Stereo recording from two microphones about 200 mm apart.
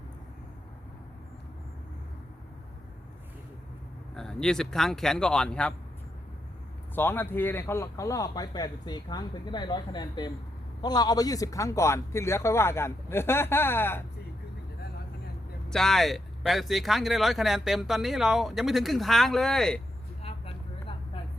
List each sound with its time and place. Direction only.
4.1 s speech: 5° left (ahead or behind)
6.9 s a man's voice: 10° left (ahead or behind)
15.7 s speech: centre (ahead or behind)
20.2 s vehicle: 30° left (ahead or behind)